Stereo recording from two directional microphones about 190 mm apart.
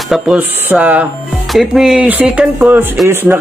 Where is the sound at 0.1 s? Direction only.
5° right (ahead or behind).